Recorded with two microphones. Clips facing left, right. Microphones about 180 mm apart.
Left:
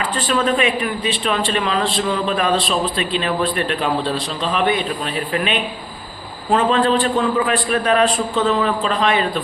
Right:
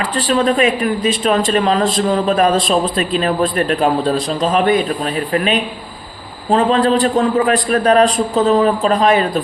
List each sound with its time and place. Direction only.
0.2 s a man's voice: 35° right (ahead or behind)